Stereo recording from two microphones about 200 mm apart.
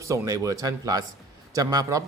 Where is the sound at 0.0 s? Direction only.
15° right (ahead or behind).